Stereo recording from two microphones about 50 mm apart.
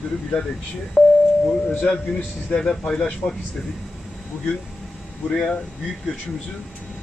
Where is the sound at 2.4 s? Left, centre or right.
Centre.